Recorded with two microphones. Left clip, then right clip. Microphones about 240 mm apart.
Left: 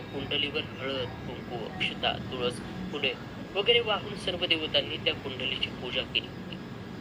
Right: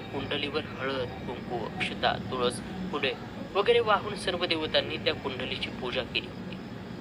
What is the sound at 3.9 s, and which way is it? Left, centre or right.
Speech, centre.